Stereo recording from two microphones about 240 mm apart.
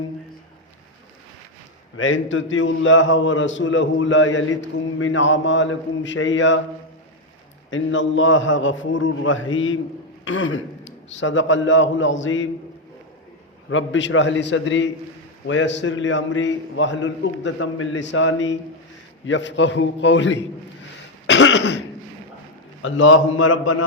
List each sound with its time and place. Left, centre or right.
2.0 s a man's voice: left
7.7 s a man's voice: left
13.7 s a man's voice: left
21.2 s cough: left
22.8 s a man's voice: left